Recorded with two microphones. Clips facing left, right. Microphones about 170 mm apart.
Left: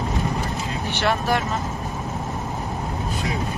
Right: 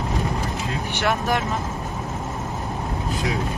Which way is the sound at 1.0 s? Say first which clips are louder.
Left 1 dB; 15° right (ahead or behind).